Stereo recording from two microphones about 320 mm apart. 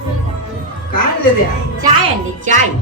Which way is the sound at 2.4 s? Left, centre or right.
Right.